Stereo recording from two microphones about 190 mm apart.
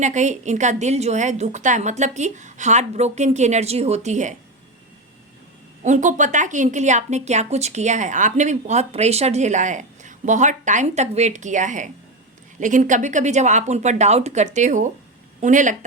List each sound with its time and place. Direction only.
0.0 s speech: 40° right (ahead or behind)
5.8 s speech: 40° right (ahead or behind)